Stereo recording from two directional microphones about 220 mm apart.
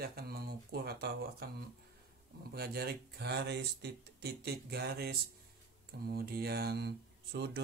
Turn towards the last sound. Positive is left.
turn(degrees=-45)  # may be behind; listen again after turning